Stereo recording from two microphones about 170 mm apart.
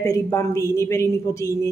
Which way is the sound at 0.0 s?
20° left (ahead or behind).